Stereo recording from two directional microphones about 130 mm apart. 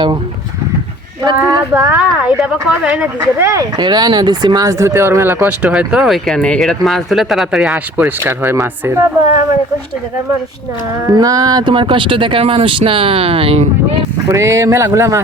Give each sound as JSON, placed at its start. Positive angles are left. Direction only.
{"t": 1.4, "sound": "speech", "side_deg": -15}
{"t": 3.2, "sound": "speech", "side_deg": -20}
{"t": 3.8, "sound": "speech", "side_deg": -35}
{"t": 7.9, "sound": "speech", "side_deg": -15}
{"t": 11.1, "sound": "speech", "side_deg": -30}
{"t": 14.3, "sound": "speech", "side_deg": -20}